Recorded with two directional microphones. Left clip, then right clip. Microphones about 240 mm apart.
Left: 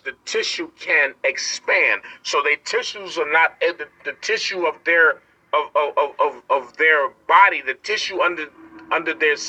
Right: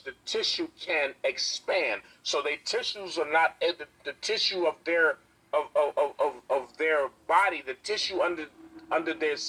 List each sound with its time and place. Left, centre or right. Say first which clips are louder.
0.0 s a man's voice: left 7 dB; left